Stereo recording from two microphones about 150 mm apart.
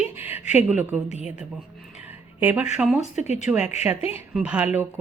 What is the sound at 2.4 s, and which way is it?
Speech, 10° right (ahead or behind).